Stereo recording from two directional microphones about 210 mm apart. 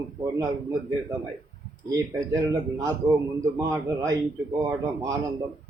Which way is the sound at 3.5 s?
15° right (ahead or behind).